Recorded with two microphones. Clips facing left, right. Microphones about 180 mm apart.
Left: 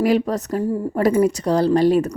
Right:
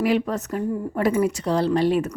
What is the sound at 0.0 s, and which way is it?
A woman's voice, 40° left (ahead or behind).